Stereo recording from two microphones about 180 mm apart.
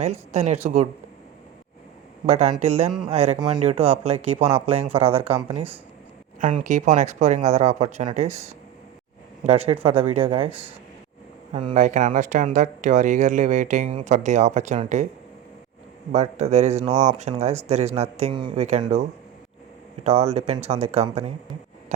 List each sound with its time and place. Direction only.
0.0 s speech: 40° right (ahead or behind)
2.2 s speech: 35° right (ahead or behind)
10.5 s speech: 10° right (ahead or behind)
11.5 s speech: 40° right (ahead or behind)
16.1 s speech: 40° right (ahead or behind)
20.1 s speech: 35° right (ahead or behind)